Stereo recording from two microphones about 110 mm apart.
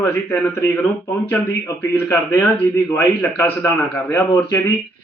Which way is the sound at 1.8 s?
20° left (ahead or behind).